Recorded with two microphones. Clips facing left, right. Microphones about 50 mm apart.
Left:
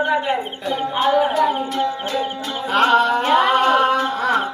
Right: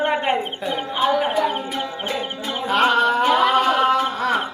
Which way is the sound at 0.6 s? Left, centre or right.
Centre.